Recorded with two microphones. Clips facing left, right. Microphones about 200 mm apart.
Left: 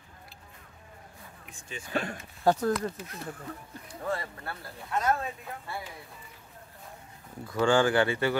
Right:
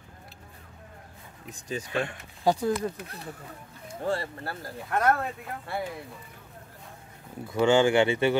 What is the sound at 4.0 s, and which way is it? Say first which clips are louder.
Speech: right 4 dB; 30° right (ahead or behind).